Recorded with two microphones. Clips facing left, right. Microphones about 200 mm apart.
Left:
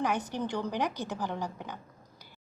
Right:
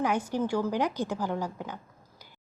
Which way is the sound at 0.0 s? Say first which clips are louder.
Right 3 dB; 10° right (ahead or behind).